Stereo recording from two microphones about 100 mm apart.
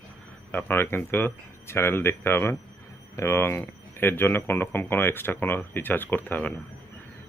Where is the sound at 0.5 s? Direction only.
20° left (ahead or behind).